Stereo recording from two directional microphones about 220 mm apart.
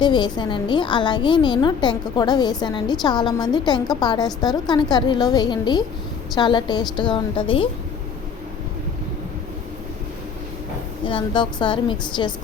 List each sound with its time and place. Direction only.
0.0 s a woman's voice: 20° left (ahead or behind)
11.0 s a woman's voice: 20° left (ahead or behind)